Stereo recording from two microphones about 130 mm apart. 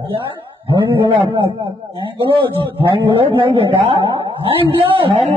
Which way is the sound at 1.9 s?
40° right (ahead or behind).